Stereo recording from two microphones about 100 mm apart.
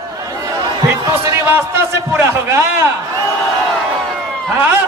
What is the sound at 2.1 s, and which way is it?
Speech, 25° right (ahead or behind).